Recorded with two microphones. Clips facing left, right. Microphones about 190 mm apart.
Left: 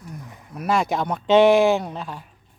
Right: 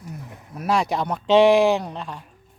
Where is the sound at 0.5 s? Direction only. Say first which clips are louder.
Even; centre (ahead or behind).